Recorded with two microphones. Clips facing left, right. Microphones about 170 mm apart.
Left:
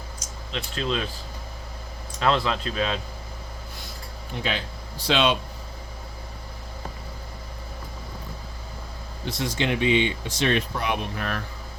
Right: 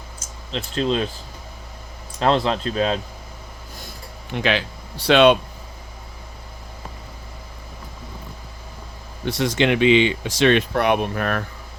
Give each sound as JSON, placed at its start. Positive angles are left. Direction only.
{"t": 0.5, "sound": "speech", "side_deg": -35}
{"t": 2.1, "sound": "speech", "side_deg": -35}
{"t": 4.3, "sound": "speech", "side_deg": -80}
{"t": 9.2, "sound": "speech", "side_deg": -75}